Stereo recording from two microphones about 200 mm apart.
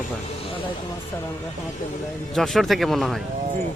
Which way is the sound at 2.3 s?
Centre (ahead or behind).